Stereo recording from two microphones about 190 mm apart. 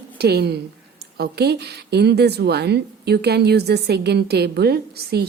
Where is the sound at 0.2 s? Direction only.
60° right (ahead or behind).